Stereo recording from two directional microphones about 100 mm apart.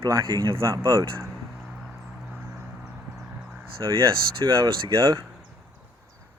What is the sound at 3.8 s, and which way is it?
Speech, 30° right (ahead or behind).